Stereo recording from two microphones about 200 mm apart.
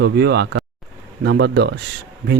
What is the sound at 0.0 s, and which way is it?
Speech, 55° right (ahead or behind).